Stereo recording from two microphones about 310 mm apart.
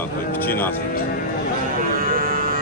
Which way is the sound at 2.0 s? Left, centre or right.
Right.